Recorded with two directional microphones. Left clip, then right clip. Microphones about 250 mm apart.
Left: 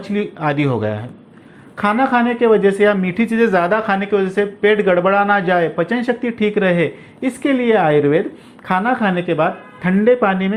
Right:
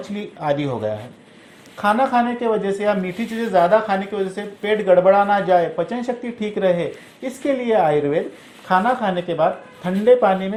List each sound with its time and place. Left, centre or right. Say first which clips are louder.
0.0 s speech: left 6 dB; left